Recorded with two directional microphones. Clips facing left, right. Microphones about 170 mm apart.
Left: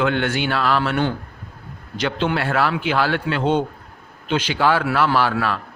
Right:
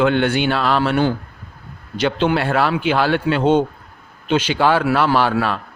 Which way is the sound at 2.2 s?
20° right (ahead or behind).